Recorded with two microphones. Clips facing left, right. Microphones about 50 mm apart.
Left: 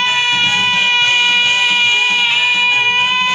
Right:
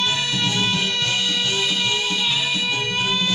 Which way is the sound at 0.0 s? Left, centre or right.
Left.